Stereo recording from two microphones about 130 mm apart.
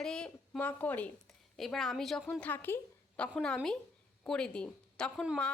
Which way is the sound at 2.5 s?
15° left (ahead or behind).